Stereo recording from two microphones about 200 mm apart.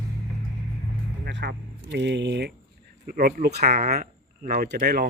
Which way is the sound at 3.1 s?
45° right (ahead or behind).